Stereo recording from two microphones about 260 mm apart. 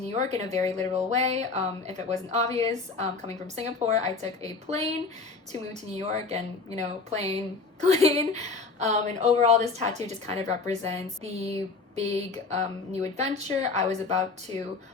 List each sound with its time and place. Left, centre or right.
0.2 s a woman's voice: right
6.0 s a woman's voice: right